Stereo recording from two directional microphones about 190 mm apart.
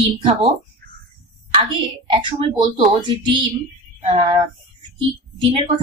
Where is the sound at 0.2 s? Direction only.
30° right (ahead or behind).